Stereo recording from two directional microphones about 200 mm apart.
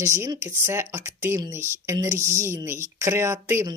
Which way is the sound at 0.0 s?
15° right (ahead or behind).